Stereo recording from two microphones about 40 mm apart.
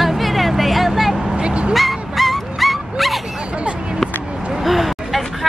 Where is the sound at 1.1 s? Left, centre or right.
Centre.